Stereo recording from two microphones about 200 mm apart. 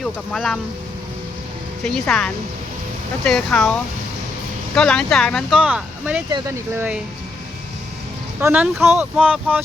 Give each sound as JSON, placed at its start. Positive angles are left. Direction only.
{"t": 0.0, "sound": "speech", "side_deg": 0}
{"t": 1.8, "sound": "speech", "side_deg": 5}
{"t": 8.4, "sound": "speech", "side_deg": -10}